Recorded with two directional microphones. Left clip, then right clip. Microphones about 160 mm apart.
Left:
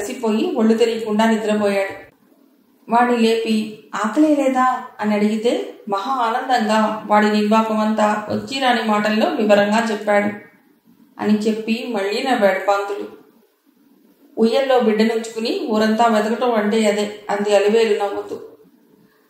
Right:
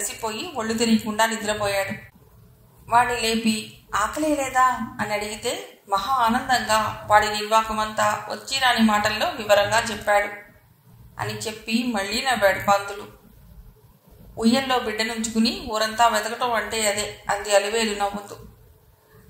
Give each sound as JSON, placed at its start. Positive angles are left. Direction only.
{"t": 0.0, "sound": "a woman's voice", "side_deg": -50}
{"t": 2.9, "sound": "a woman's voice", "side_deg": -45}
{"t": 14.3, "sound": "a woman's voice", "side_deg": -50}